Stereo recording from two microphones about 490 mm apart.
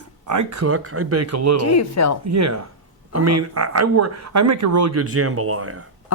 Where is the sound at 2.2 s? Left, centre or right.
Right.